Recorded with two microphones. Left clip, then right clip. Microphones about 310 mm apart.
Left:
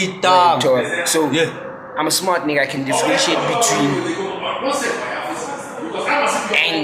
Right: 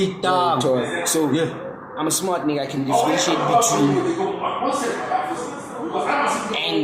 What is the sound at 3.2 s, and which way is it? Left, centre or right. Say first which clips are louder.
Speech: left 1 dB; left.